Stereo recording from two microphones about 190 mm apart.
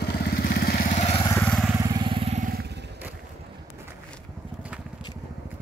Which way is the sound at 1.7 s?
20° right (ahead or behind).